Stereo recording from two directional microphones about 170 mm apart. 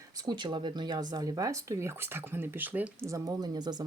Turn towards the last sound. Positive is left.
turn(degrees=-25)  # may be behind; listen again after turning